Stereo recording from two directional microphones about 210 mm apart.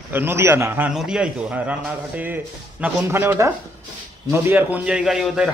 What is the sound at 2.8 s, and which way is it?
A man's voice, 10° right (ahead or behind).